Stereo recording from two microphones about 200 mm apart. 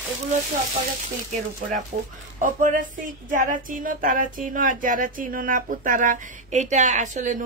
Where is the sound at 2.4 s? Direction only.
40° right (ahead or behind).